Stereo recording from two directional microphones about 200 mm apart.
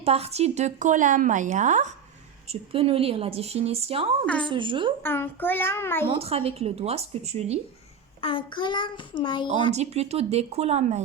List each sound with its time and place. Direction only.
0.0 s a woman's voice: 30° right (ahead or behind)
5.0 s a child's voice: 10° left (ahead or behind)
6.1 s a woman's voice: 30° right (ahead or behind)
8.2 s a child's voice: 25° left (ahead or behind)
9.7 s a woman's voice: 30° right (ahead or behind)